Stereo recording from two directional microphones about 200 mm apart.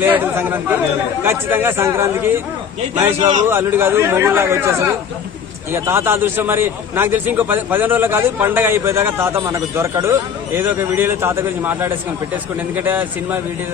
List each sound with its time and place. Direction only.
0.0 s a man's voice: 10° right (ahead or behind)
3.2 s a man's voice: 35° right (ahead or behind)
3.4 s a man's voice: 10° right (ahead or behind)